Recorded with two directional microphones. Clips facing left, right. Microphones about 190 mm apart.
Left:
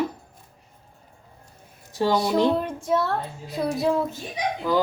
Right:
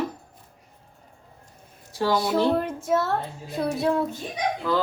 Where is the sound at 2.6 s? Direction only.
5° right (ahead or behind).